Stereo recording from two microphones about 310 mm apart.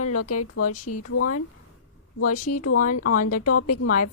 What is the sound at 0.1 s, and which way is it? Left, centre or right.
A woman's voice, left.